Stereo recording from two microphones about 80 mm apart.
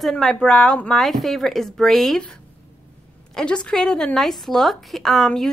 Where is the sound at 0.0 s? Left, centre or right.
Centre.